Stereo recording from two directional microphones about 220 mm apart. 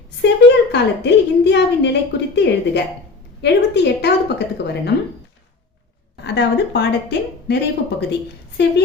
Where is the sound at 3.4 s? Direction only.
50° left (ahead or behind).